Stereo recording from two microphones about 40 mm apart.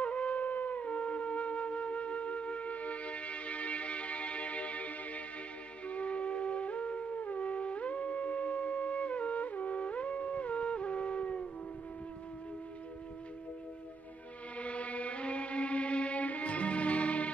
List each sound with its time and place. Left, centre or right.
0.0 s wind instrument: left
5.9 s music: left
14.6 s music: left